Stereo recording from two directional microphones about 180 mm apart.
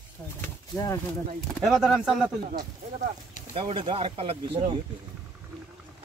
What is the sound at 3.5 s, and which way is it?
Speech, 30° right (ahead or behind).